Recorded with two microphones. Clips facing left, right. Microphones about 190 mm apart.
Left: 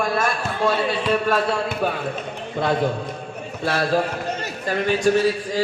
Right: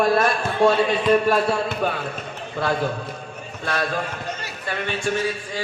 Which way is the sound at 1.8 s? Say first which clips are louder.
Left 1 dB; 10° left (ahead or behind).